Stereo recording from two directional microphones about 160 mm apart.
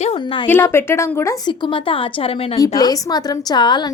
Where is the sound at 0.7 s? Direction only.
15° left (ahead or behind).